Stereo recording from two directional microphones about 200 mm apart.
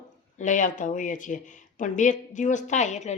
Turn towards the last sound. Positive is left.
turn(degrees=35)  # may be behind; listen again after turning